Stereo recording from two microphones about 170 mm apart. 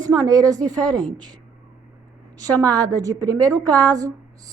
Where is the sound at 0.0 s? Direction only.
20° right (ahead or behind).